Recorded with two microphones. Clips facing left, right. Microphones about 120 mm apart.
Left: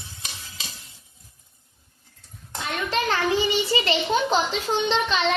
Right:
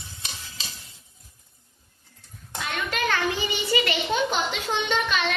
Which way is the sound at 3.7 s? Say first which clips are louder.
Right 2 dB; 25° left (ahead or behind).